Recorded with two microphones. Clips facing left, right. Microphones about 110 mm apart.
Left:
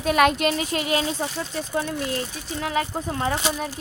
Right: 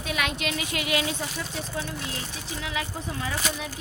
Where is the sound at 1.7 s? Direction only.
50° left (ahead or behind).